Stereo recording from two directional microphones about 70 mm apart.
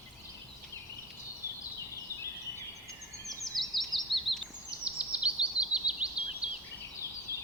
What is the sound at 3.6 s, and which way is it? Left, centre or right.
Bird vocalization, centre.